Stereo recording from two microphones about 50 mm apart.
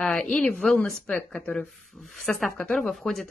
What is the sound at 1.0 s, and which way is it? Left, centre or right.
Speech, left.